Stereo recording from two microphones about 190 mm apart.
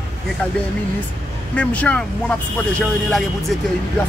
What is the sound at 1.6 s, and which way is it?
Music, 5° left (ahead or behind).